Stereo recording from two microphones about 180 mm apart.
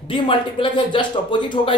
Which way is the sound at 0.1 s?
30° left (ahead or behind).